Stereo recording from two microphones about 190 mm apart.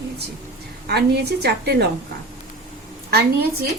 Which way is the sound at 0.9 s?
60° right (ahead or behind).